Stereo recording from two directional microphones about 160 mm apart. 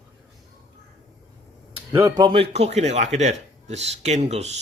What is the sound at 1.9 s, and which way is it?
Speech, 20° right (ahead or behind).